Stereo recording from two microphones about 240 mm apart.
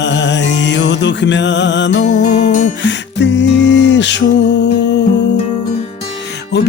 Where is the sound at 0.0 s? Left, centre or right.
Left.